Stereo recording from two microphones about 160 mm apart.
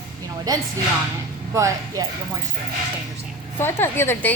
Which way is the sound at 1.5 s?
20° right (ahead or behind).